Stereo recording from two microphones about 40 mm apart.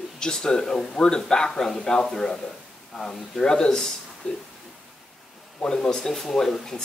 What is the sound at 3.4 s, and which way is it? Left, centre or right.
Speech, centre.